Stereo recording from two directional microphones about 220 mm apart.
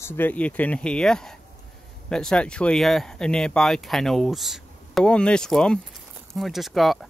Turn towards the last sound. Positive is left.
turn(degrees=0)  # may be behind; listen again after turning